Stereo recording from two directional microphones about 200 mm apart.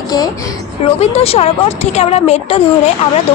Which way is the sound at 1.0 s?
30° left (ahead or behind).